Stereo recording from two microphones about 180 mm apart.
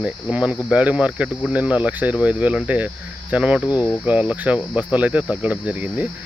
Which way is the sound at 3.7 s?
20° left (ahead or behind).